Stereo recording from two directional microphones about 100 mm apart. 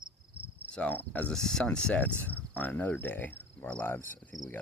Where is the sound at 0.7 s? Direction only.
15° left (ahead or behind).